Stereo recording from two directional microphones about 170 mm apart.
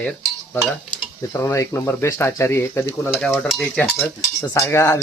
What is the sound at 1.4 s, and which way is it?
Speech, 15° left (ahead or behind).